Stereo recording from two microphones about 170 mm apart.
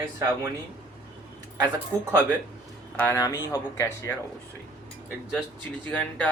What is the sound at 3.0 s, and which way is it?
Speech, 15° left (ahead or behind).